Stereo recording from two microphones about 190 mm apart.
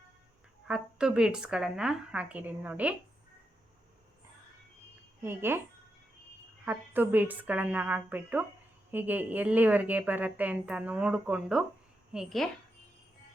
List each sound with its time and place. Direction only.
0.7 s a woman's voice: 5° right (ahead or behind)
5.2 s a woman's voice: 10° right (ahead or behind)
6.7 s a woman's voice: 10° right (ahead or behind)